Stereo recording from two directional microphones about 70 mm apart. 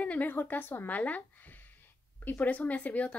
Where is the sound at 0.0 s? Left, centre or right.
Left.